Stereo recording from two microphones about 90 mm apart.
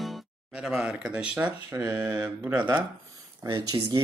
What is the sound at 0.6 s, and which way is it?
Speech, 5° right (ahead or behind).